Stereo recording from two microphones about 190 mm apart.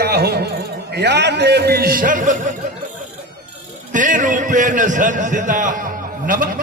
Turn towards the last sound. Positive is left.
turn(degrees=-45)  # may be behind; listen again after turning